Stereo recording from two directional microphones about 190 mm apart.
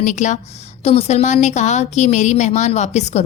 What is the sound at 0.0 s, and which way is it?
A woman's voice, 40° left (ahead or behind).